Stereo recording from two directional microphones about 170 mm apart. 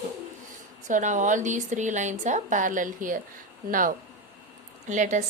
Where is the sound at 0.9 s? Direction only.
50° right (ahead or behind).